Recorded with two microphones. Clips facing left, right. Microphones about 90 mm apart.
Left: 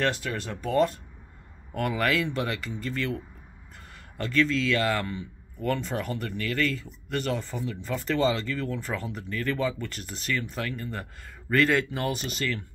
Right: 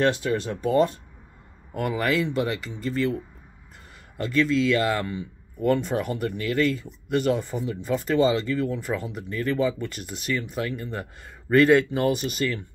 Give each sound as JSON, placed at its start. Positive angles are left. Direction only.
{"t": 0.0, "sound": "speech", "side_deg": -20}
{"t": 4.2, "sound": "speech", "side_deg": -10}